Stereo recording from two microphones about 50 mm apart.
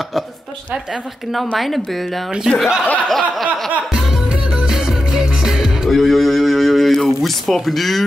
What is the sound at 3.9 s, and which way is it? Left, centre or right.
Music, centre.